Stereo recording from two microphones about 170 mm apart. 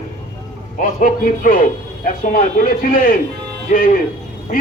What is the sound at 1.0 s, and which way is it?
A man's voice, 55° left (ahead or behind).